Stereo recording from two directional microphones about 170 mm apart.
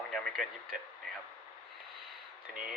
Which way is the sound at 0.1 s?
Centre (ahead or behind).